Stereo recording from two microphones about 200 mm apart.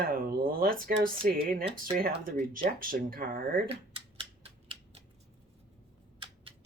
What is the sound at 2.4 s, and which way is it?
Speech, 45° right (ahead or behind).